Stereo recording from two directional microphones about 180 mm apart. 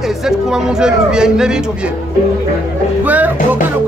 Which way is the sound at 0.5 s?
5° right (ahead or behind).